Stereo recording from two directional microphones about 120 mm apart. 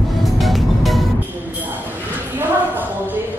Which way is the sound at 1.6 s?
15° right (ahead or behind).